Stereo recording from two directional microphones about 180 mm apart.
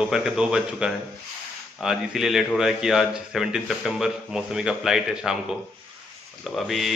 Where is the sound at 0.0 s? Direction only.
5° right (ahead or behind).